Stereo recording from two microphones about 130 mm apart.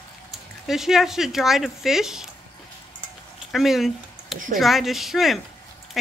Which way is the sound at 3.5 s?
Centre (ahead or behind).